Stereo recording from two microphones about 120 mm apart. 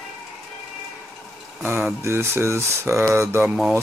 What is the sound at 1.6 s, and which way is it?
Speech, 15° right (ahead or behind).